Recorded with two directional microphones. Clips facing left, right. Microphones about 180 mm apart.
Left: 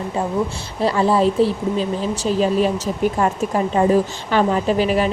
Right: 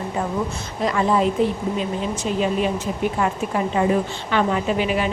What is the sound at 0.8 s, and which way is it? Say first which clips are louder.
A woman's voice: left 3 dB; 30° left (ahead or behind).